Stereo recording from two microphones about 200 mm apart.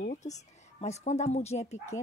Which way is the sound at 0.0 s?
40° left (ahead or behind).